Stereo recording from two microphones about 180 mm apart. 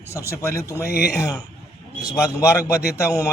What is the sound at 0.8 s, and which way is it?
Speech, 60° left (ahead or behind).